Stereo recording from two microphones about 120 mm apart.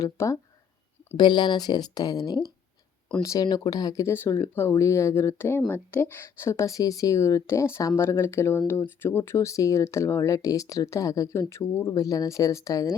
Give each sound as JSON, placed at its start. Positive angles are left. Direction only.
{"t": 0.0, "sound": "speech", "side_deg": 25}
{"t": 1.1, "sound": "speech", "side_deg": 40}